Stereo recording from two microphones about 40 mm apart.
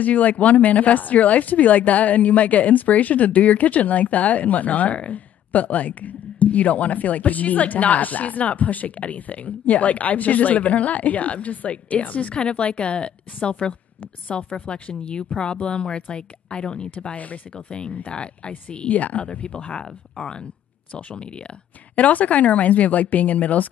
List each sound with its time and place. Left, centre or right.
0.0 s speech: left
12.4 s speech: left
17.1 s speech: left
17.6 s speech: left
18.9 s speech: left
19.2 s speech: left
21.9 s speech: left